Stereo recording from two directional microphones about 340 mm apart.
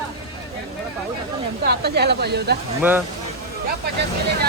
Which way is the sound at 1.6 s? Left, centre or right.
Right.